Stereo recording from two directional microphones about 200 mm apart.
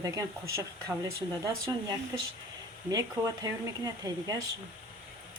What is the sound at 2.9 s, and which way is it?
Speech, 15° right (ahead or behind).